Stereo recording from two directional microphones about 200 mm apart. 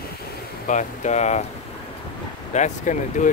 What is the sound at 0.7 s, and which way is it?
Speech, 35° left (ahead or behind).